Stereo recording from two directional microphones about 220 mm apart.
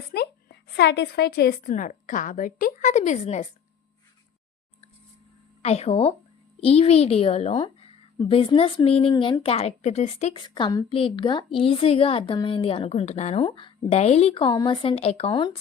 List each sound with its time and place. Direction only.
0.1 s a woman's voice: 45° left (ahead or behind)
5.6 s a woman's voice: 30° left (ahead or behind)